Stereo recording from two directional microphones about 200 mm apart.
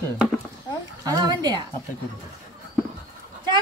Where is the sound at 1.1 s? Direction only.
20° right (ahead or behind).